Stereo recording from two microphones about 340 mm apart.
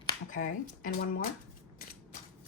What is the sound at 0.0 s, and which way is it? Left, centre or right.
Speech, left.